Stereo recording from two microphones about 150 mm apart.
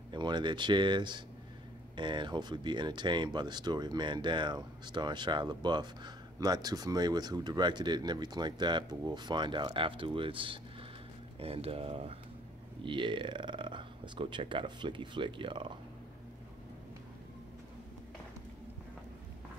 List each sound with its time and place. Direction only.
0.1 s speech: 30° right (ahead or behind)